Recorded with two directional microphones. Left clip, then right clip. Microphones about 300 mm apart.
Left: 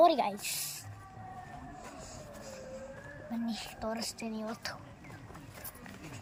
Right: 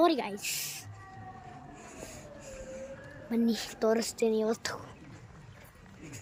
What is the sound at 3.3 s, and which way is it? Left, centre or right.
Speech, centre.